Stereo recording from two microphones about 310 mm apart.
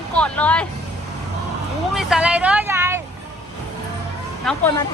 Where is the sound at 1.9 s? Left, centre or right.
Centre.